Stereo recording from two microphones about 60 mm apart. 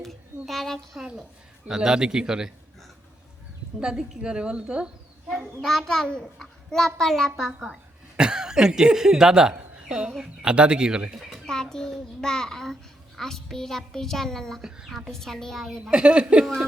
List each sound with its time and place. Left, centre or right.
0.0 s a sound: centre
1.6 s speech: centre
3.8 s speech: centre
5.5 s a child's voice: centre
11.4 s a child's voice: centre
15.8 s speech: centre